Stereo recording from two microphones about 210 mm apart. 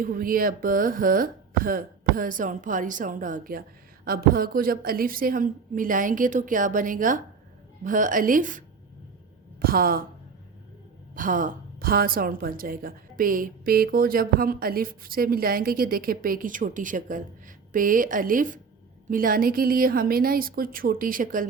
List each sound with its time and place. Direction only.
0.0 s speech: 45° right (ahead or behind)
11.1 s a woman's voice: 40° right (ahead or behind)